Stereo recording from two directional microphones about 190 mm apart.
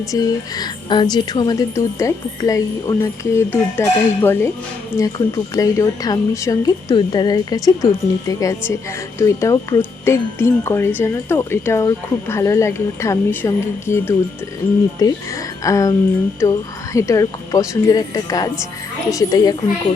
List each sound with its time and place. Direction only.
0.1 s speech: 20° left (ahead or behind)